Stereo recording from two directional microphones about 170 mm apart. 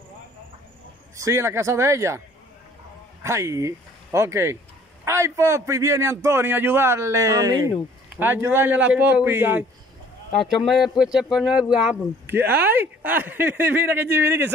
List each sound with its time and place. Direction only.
1.1 s a man's voice: 15° right (ahead or behind)
3.3 s a man's voice: 15° right (ahead or behind)
10.7 s a man's voice: centre (ahead or behind)